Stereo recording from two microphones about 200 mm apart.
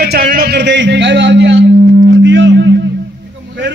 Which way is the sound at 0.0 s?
50° right (ahead or behind).